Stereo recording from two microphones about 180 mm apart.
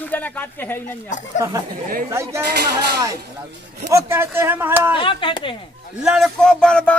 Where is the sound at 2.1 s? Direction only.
15° right (ahead or behind).